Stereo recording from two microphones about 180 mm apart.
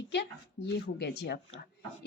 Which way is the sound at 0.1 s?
70° left (ahead or behind).